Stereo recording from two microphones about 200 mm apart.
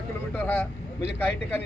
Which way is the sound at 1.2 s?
10° left (ahead or behind).